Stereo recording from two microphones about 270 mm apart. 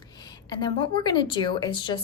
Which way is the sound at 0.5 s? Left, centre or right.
Centre.